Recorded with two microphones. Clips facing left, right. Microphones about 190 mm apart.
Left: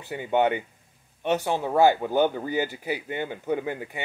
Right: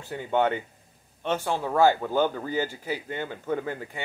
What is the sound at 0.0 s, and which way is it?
Speech, 15° left (ahead or behind).